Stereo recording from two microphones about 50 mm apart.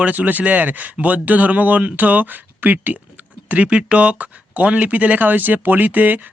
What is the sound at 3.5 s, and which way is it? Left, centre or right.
A man's voice, right.